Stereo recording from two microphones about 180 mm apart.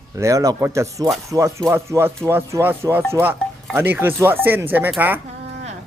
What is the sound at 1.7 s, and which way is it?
Speech, 15° right (ahead or behind).